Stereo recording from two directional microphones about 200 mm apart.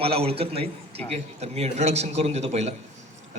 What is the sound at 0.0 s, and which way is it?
A man's voice, 30° right (ahead or behind).